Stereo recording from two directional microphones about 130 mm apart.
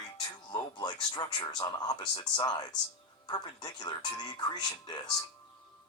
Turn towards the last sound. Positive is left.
turn(degrees=35)  # may be behind; listen again after turning